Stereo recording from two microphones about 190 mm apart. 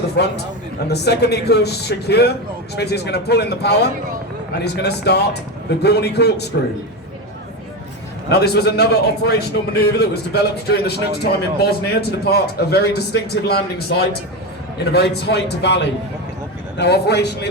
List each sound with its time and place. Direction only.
0.2 s a man's voice: 60° left (ahead or behind)
8.3 s a man's voice: 60° left (ahead or behind)